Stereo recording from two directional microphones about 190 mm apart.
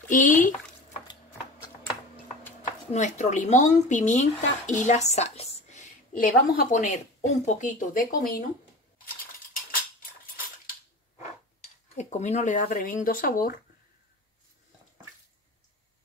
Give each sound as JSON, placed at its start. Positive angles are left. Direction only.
{"t": 0.1, "sound": "speech", "side_deg": 45}
{"t": 2.9, "sound": "speech", "side_deg": 40}
{"t": 11.9, "sound": "speech", "side_deg": 40}